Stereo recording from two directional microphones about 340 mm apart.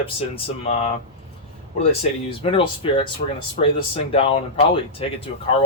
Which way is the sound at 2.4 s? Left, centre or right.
Centre.